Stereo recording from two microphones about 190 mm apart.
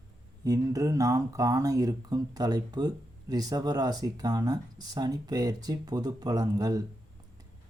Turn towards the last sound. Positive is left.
turn(degrees=-20)  # may be behind; listen again after turning